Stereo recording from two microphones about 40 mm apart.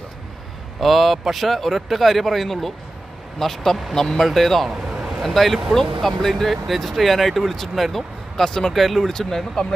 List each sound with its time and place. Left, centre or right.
0.8 s speech: centre
8.4 s speech: centre
8.7 s speech: centre